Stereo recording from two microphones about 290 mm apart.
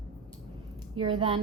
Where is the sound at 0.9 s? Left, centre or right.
Centre.